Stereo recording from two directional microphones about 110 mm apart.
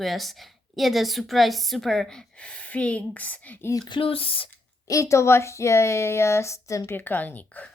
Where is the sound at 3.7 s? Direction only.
45° left (ahead or behind).